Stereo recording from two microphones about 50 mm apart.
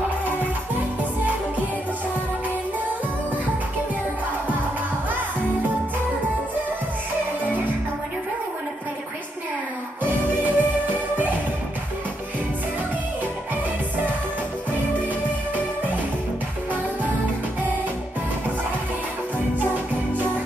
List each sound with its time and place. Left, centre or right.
10.0 s music: right